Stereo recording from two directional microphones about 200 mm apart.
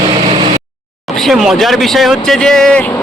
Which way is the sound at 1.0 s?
Centre (ahead or behind).